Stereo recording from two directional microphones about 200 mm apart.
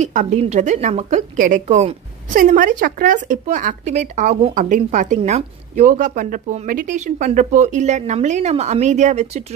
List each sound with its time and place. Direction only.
0.0 s a woman's voice: 35° right (ahead or behind)